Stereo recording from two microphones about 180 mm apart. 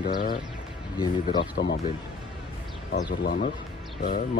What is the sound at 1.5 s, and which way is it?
Speech, 70° left (ahead or behind).